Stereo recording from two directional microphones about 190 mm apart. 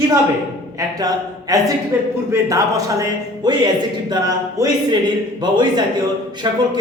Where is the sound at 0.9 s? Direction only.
20° right (ahead or behind).